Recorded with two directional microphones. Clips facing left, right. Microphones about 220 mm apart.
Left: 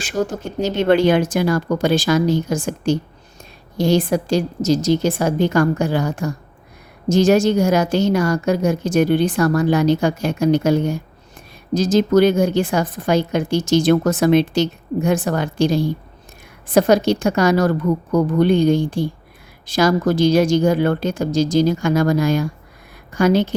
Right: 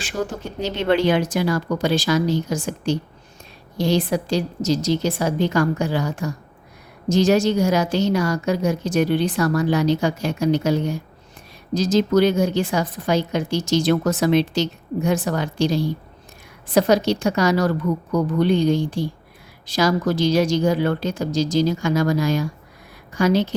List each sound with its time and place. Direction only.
0.0 s a woman's voice: 45° left (ahead or behind)